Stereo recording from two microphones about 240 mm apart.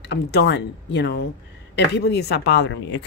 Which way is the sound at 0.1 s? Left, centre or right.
Left.